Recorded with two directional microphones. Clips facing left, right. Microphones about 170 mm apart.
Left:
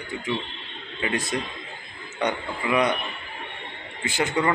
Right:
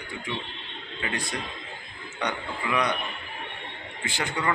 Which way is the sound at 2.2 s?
20° left (ahead or behind).